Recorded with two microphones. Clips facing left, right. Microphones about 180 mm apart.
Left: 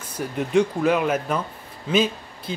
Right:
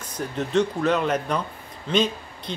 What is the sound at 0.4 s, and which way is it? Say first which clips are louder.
Speech: left 2 dB; 10° left (ahead or behind).